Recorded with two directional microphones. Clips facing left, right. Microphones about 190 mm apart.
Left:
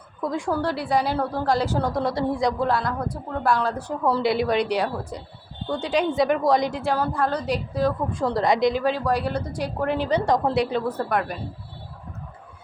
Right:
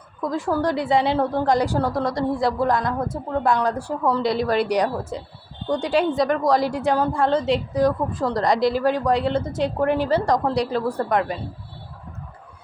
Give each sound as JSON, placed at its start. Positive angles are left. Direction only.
{"t": 0.2, "sound": "a woman's voice", "side_deg": 0}
{"t": 0.6, "sound": "a woman's voice", "side_deg": -15}
{"t": 1.9, "sound": "a woman's voice", "side_deg": 0}
{"t": 2.6, "sound": "a woman's voice", "side_deg": -15}
{"t": 4.0, "sound": "a woman's voice", "side_deg": 5}
{"t": 6.7, "sound": "a woman's voice", "side_deg": -15}
{"t": 8.1, "sound": "a woman's voice", "side_deg": 0}
{"t": 9.8, "sound": "a woman's voice", "side_deg": -10}